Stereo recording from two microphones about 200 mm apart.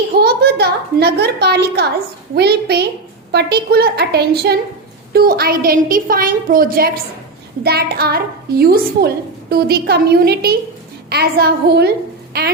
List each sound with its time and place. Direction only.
0.2 s a child's voice: 55° right (ahead or behind)